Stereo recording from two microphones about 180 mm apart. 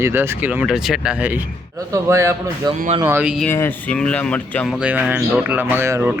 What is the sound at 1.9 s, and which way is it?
Speech, 15° right (ahead or behind).